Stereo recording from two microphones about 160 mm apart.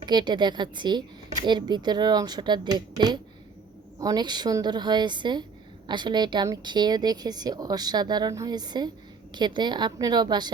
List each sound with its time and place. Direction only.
0.0 s a woman's voice: 25° right (ahead or behind)